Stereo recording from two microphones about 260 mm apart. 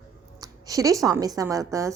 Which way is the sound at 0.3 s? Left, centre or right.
Centre.